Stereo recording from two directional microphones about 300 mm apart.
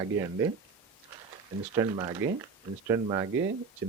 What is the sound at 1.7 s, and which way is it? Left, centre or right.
A man's voice, centre.